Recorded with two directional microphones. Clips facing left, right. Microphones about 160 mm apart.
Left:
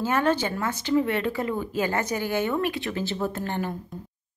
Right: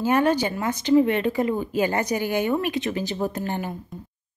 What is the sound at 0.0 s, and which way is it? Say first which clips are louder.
Speech: right 3 dB; 15° right (ahead or behind).